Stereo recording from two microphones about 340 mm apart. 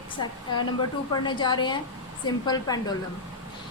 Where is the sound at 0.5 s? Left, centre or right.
Centre.